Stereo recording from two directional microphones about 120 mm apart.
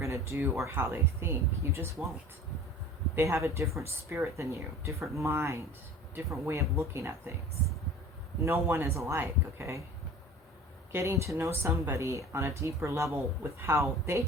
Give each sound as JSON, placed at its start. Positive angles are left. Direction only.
{"t": 0.0, "sound": "speech", "side_deg": -25}
{"t": 3.2, "sound": "speech", "side_deg": -25}
{"t": 8.4, "sound": "speech", "side_deg": -20}
{"t": 10.9, "sound": "speech", "side_deg": -25}